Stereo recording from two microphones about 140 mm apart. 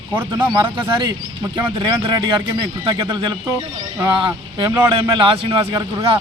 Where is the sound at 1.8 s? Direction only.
30° right (ahead or behind).